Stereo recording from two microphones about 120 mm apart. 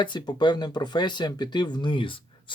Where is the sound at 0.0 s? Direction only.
40° left (ahead or behind).